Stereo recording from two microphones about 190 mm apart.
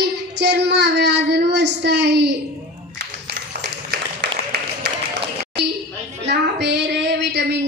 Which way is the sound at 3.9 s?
60° right (ahead or behind).